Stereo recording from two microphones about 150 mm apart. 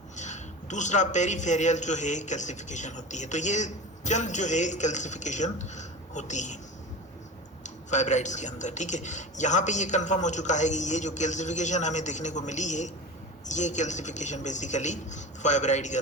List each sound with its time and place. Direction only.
0.2 s a man's voice: 50° left (ahead or behind)
7.6 s a man's voice: 50° left (ahead or behind)